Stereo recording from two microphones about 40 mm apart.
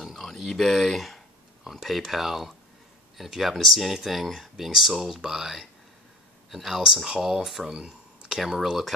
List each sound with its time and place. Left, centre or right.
0.0 s speech: centre
7.7 s a sound: right
8.4 s speech: centre